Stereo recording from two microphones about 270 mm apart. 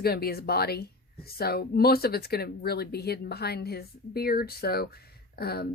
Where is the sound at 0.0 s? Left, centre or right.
Left.